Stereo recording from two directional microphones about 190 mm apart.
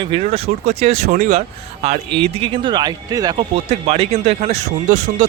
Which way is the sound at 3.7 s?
35° right (ahead or behind).